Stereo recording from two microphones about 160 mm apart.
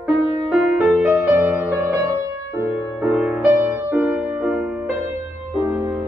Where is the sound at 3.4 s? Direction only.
20° right (ahead or behind).